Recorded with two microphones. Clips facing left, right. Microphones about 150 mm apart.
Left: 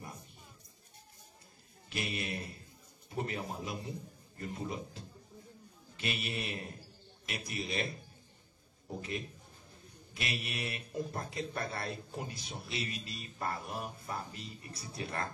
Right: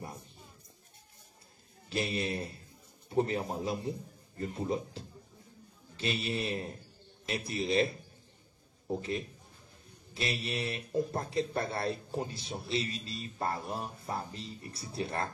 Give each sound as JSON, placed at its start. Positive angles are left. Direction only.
{"t": 1.9, "sound": "a man's voice", "side_deg": -30}
{"t": 8.8, "sound": "a man's voice", "side_deg": -30}